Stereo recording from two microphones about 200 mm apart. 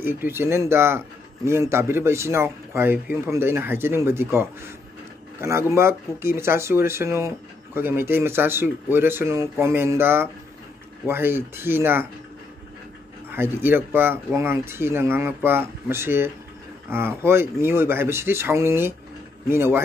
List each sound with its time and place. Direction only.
0.0 s speech: 10° right (ahead or behind)
13.3 s speech: 10° right (ahead or behind)